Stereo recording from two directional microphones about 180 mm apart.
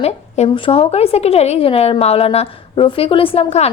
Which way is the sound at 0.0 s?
35° left (ahead or behind).